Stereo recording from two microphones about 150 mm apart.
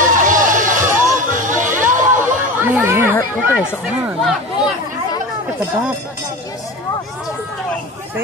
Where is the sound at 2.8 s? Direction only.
15° right (ahead or behind).